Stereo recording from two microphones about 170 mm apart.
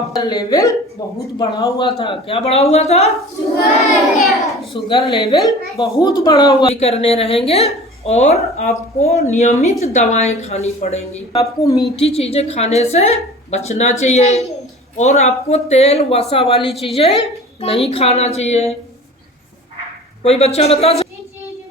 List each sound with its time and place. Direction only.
0.2 s a child's voice: 20° left (ahead or behind); by 3.1 s 40° left (ahead or behind)
3.9 s a child's voice: centre (ahead or behind)
4.7 s a woman's voice: 30° left (ahead or behind)
6.7 s a woman's voice: 40° left (ahead or behind)
20.2 s a woman's voice: 40° left (ahead or behind)